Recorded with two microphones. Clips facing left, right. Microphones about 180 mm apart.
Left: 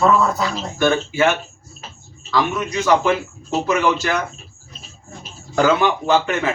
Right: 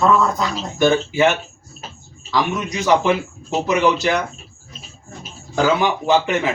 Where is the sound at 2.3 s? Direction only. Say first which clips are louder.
Left 1 dB; 15° right (ahead or behind).